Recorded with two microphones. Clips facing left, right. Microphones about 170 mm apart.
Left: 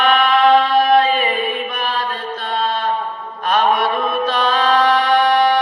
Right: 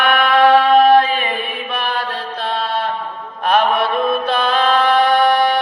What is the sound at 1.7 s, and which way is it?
Mantra, 65° right (ahead or behind).